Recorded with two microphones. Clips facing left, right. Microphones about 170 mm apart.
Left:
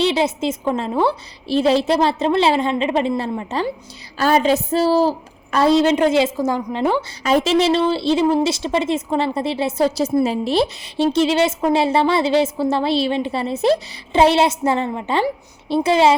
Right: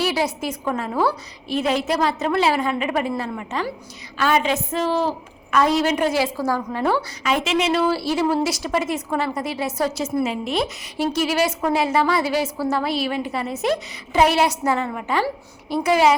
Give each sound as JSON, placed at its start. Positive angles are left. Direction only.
{"t": 0.0, "sound": "a woman's voice", "side_deg": 25}
{"t": 7.3, "sound": "a woman's voice", "side_deg": 35}